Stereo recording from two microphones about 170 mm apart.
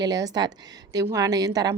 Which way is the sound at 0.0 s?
20° right (ahead or behind).